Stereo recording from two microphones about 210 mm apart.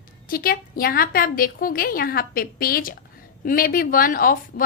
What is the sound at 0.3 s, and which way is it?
A woman's voice, 45° left (ahead or behind).